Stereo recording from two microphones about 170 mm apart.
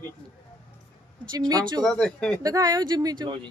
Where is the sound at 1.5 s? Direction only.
20° right (ahead or behind).